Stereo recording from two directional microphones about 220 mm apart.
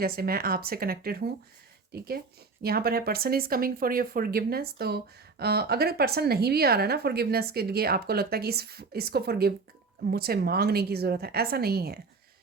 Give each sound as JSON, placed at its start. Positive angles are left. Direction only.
{"t": 0.0, "sound": "speech", "side_deg": -45}